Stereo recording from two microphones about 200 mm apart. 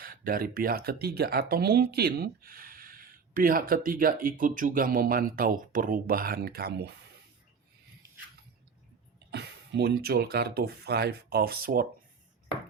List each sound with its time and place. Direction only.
0.0 s speech: 45° right (ahead or behind)
9.3 s speech: 55° right (ahead or behind)